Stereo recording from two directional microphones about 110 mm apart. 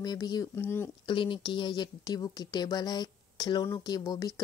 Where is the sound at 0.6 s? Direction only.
20° left (ahead or behind).